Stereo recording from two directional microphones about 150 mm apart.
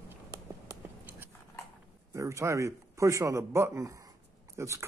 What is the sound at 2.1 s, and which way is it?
Speech, 20° right (ahead or behind).